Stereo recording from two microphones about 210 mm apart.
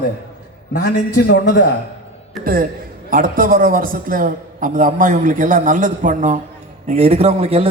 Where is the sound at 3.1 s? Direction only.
40° right (ahead or behind).